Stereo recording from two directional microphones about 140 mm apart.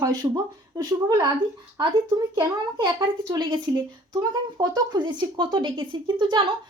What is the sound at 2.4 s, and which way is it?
A woman's voice, 30° right (ahead or behind).